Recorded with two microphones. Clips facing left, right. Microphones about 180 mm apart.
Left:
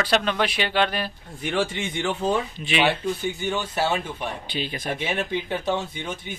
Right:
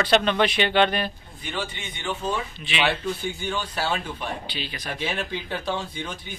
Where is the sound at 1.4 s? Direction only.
85° left.